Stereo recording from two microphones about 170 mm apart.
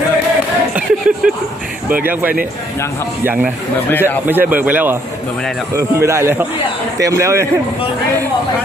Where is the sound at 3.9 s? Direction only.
10° left (ahead or behind).